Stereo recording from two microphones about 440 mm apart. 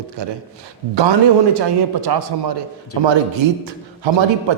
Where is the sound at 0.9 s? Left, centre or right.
Right.